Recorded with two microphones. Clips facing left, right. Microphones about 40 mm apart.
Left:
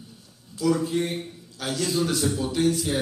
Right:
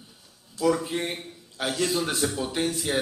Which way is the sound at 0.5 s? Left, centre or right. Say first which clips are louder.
Left 1 dB; right.